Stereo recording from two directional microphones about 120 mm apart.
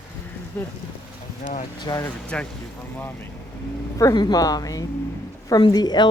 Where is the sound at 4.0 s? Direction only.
30° left (ahead or behind).